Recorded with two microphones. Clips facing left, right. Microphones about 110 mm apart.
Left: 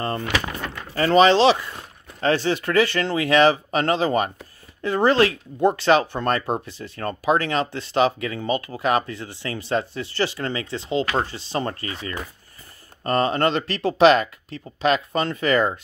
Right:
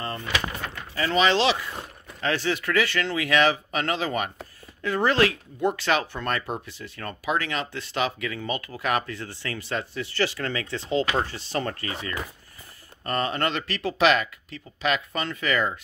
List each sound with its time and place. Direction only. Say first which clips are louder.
0.9 s speech: left 7 dB; 40° left (ahead or behind); by 11.8 s 25° left (ahead or behind)
13.0 s speech: left 6 dB; 30° left (ahead or behind)